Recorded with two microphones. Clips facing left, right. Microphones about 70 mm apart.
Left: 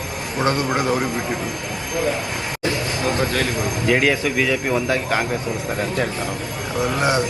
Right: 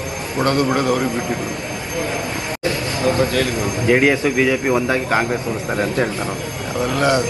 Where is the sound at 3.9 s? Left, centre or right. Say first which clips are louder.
Right 4 dB; centre.